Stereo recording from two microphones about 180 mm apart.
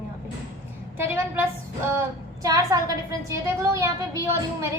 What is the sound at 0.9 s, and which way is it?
A woman's voice, 15° right (ahead or behind).